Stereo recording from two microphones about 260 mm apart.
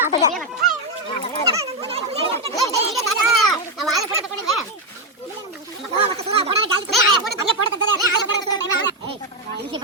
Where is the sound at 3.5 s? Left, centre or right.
Centre.